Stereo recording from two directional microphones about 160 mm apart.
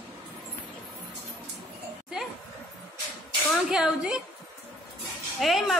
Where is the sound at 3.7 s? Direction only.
5° right (ahead or behind).